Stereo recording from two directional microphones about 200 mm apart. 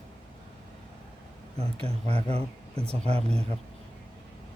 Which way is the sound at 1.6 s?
30° right (ahead or behind).